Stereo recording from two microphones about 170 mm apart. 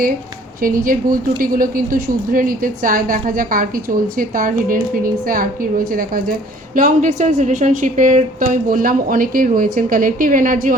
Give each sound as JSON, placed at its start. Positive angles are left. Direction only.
{"t": 0.6, "sound": "a woman's voice", "side_deg": -55}
{"t": 6.7, "sound": "a woman's voice", "side_deg": -50}